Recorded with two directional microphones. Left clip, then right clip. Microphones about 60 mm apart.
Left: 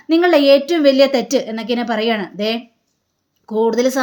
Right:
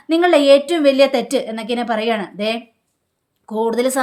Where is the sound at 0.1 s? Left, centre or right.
Right.